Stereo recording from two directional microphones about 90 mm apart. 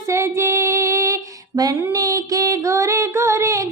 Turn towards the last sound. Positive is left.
turn(degrees=-35)  # may be behind; listen again after turning